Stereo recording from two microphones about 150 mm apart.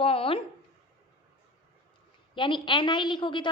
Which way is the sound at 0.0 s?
35° left (ahead or behind).